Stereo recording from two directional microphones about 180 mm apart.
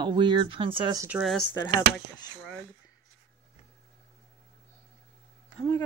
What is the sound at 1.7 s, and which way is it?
Speech, 25° left (ahead or behind).